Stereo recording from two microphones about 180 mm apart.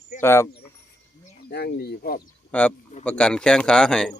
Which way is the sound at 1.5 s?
65° left (ahead or behind).